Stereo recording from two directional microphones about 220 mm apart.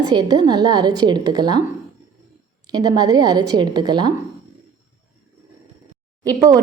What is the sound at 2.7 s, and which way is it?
A woman's voice, 20° right (ahead or behind).